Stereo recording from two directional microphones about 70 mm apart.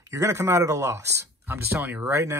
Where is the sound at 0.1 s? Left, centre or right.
Right.